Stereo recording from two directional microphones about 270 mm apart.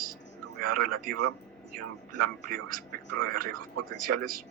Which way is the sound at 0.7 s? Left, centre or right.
Right.